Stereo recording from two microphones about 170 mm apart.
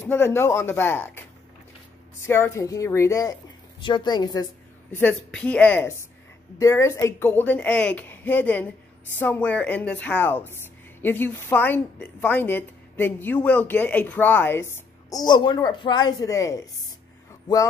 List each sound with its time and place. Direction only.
0.0 s speech: 15° left (ahead or behind)
2.2 s a woman's voice: 15° left (ahead or behind)
4.9 s speech: 10° left (ahead or behind)